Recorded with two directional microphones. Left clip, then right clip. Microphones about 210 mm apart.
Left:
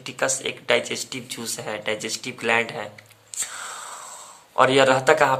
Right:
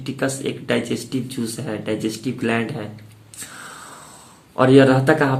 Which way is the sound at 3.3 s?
25° left (ahead or behind).